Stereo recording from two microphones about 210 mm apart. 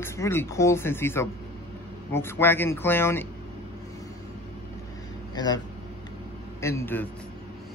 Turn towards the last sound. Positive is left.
turn(degrees=10)  # may be behind; listen again after turning